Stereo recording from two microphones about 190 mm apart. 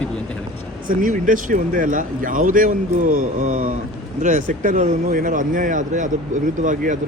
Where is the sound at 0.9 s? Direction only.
45° right (ahead or behind).